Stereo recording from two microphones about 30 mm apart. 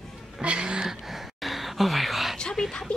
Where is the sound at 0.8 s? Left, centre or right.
Centre.